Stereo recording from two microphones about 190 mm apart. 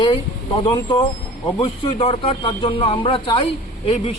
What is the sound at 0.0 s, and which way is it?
A man's voice, 25° left (ahead or behind).